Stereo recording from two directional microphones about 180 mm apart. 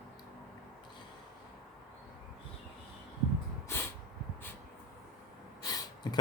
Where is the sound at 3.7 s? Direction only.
15° left (ahead or behind).